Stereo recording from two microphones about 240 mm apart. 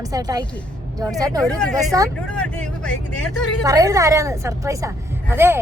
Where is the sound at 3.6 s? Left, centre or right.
Centre.